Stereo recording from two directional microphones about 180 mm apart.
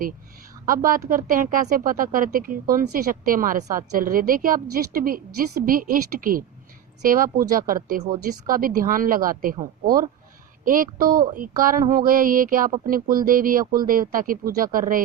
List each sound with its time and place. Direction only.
0.6 s speech: 50° right (ahead or behind)